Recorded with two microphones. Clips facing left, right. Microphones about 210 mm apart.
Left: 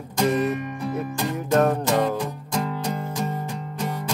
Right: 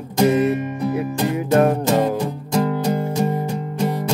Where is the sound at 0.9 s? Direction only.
10° right (ahead or behind).